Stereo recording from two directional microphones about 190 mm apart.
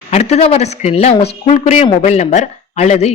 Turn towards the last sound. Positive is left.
turn(degrees=35)  # may be behind; listen again after turning